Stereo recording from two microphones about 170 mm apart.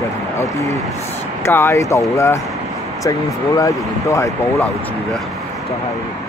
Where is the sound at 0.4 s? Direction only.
20° left (ahead or behind).